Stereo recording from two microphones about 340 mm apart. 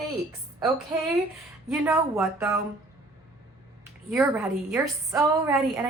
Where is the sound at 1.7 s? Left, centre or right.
Centre.